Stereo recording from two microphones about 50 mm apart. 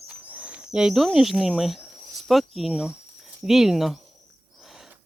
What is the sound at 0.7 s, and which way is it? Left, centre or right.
Speech, centre.